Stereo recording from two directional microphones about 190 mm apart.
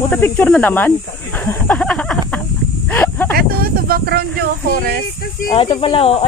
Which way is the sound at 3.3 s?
55° right (ahead or behind).